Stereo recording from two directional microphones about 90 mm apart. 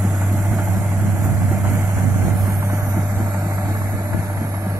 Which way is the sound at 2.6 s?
35° right (ahead or behind).